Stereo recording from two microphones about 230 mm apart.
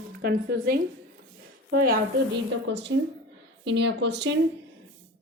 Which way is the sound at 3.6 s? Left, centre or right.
Right.